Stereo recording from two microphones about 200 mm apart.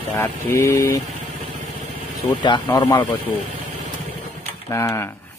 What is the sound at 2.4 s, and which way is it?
Speech, 20° left (ahead or behind).